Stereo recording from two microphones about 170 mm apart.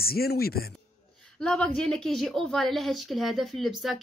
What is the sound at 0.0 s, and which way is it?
Speech, 65° left (ahead or behind).